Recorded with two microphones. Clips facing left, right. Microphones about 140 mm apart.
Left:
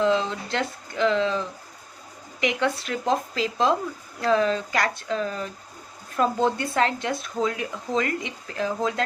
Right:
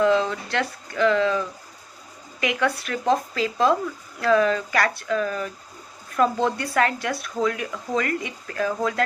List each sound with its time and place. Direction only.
0.0 s speech: 25° left (ahead or behind)